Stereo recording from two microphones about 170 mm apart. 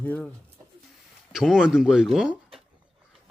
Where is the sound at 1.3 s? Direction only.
Centre (ahead or behind).